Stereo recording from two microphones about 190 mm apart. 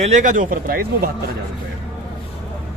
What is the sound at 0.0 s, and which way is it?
A man's voice, 40° right (ahead or behind).